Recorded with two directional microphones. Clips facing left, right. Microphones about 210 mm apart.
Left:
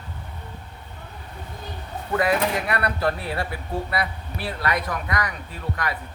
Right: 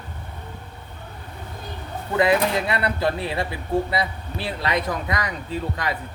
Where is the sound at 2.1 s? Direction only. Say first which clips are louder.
Right 3 dB; 25° right (ahead or behind).